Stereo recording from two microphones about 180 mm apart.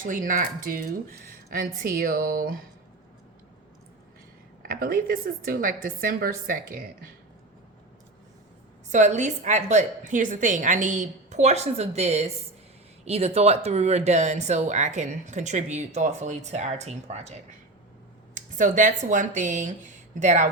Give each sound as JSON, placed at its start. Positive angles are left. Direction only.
{"t": 0.0, "sound": "speech", "side_deg": -50}
{"t": 4.6, "sound": "speech", "side_deg": -55}
{"t": 8.9, "sound": "speech", "side_deg": -40}
{"t": 18.3, "sound": "speech", "side_deg": -45}